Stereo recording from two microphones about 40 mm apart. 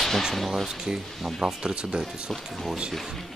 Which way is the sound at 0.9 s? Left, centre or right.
Centre.